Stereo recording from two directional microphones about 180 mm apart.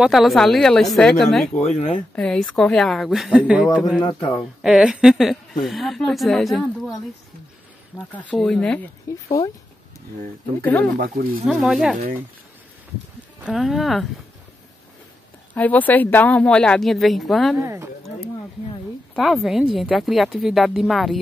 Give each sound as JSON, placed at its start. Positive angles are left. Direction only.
{"t": 0.0, "sound": "a woman's voice", "side_deg": 0}
{"t": 1.8, "sound": "a man's voice", "side_deg": 30}
{"t": 2.1, "sound": "a woman's voice", "side_deg": 5}
{"t": 4.0, "sound": "a man's voice", "side_deg": 25}
{"t": 4.4, "sound": "a woman's voice", "side_deg": 0}
{"t": 8.1, "sound": "speech", "side_deg": 5}
{"t": 10.6, "sound": "speech", "side_deg": 10}
{"t": 11.0, "sound": "speech", "side_deg": -55}
{"t": 11.4, "sound": "a woman's voice", "side_deg": 0}
{"t": 13.5, "sound": "a woman's voice", "side_deg": 0}
{"t": 15.5, "sound": "a woman's voice", "side_deg": 10}
{"t": 17.6, "sound": "speech", "side_deg": -15}
{"t": 19.1, "sound": "a woman's voice", "side_deg": 0}